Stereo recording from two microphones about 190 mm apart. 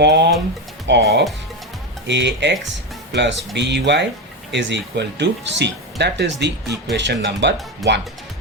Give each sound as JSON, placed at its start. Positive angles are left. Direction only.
{"t": 0.0, "sound": "speech", "side_deg": -60}